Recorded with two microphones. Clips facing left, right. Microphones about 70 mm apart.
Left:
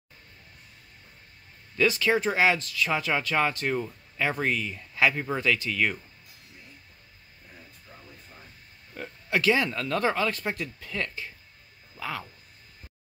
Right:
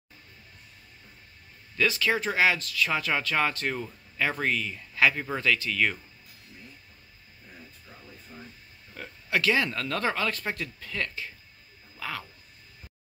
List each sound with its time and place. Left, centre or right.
1.8 s speech: left
8.9 s a sound: centre
9.7 s speech: centre